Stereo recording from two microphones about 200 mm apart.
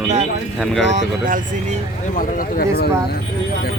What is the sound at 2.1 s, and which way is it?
Speech, 45° left (ahead or behind).